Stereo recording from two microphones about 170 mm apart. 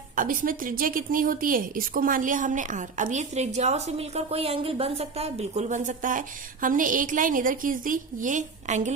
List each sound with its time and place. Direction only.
0.2 s a woman's voice: 55° right (ahead or behind)